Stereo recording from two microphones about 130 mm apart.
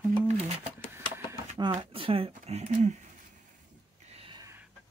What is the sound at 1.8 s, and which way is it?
Speech, 45° right (ahead or behind).